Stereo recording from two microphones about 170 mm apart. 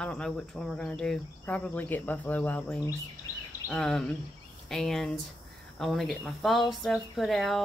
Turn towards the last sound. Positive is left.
turn(degrees=0)  # may be behind; listen again after turning